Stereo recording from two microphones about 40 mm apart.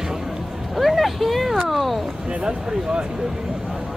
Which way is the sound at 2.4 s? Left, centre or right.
Centre.